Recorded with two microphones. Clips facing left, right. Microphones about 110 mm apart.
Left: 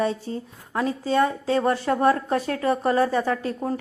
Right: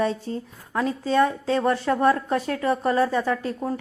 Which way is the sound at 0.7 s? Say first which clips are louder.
Even; 35° left (ahead or behind).